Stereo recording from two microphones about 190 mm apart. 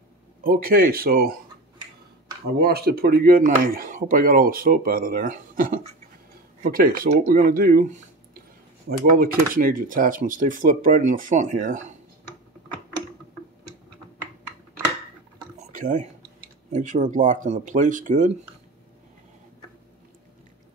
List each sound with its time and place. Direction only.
0.4 s speech: 50° right (ahead or behind)
2.6 s speech: 55° right (ahead or behind)
15.7 s speech: 40° right (ahead or behind)